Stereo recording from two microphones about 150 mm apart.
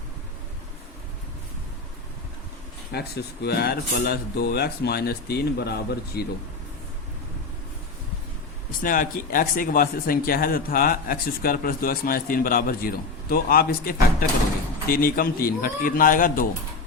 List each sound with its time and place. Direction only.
2.9 s speech: 90° left
8.8 s speech: 65° left (ahead or behind)
13.3 s speech: 85° left; by 16.5 s 65° left (ahead or behind)